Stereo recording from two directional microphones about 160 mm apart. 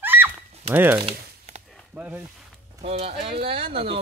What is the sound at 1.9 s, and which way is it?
Speech, 10° right (ahead or behind).